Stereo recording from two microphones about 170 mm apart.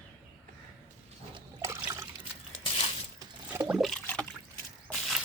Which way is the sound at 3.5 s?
10° right (ahead or behind).